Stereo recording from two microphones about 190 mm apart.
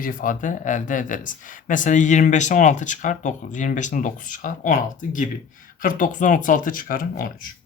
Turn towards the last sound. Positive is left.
turn(degrees=45)  # may be behind; listen again after turning